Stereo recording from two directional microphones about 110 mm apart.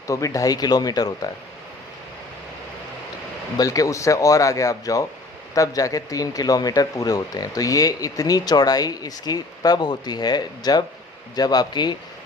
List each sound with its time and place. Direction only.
0.1 s speech: 30° left (ahead or behind)
3.6 s speech: 30° left (ahead or behind)